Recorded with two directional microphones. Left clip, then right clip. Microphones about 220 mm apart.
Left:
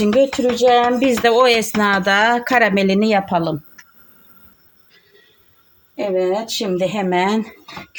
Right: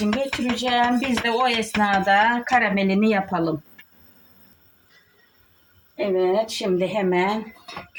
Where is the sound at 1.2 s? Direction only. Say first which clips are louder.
Left 9 dB; 50° left (ahead or behind); by 3.5 s 30° left (ahead or behind).